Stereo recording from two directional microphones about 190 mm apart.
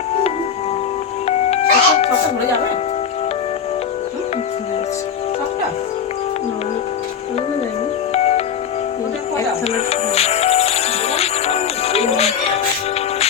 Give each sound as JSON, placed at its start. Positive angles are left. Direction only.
{"t": 1.5, "sound": "music", "side_deg": 35}
{"t": 8.1, "sound": "music", "side_deg": 35}
{"t": 9.7, "sound": "music", "side_deg": 30}